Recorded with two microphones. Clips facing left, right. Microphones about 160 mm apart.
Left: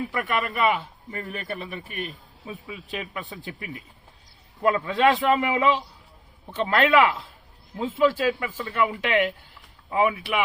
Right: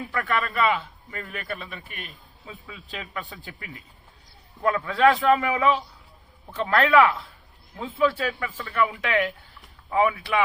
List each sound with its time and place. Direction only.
0.1 s a man's voice: 20° left (ahead or behind)